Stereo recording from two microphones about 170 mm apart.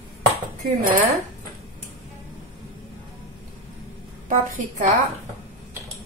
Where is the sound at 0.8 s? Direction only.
55° right (ahead or behind).